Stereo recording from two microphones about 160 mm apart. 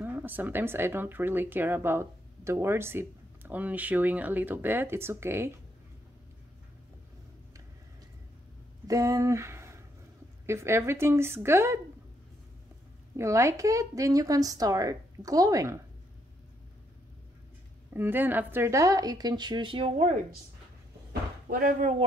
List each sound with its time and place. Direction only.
0.0 s speech: 10° right (ahead or behind)
8.8 s speech: 20° right (ahead or behind)
13.1 s a woman's voice: 20° right (ahead or behind)
17.9 s a woman's voice: 15° right (ahead or behind); by 20.2 s 40° right (ahead or behind)
21.5 s speech: 60° right (ahead or behind)